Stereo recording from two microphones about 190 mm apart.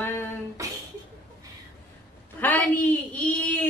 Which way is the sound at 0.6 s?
15° right (ahead or behind).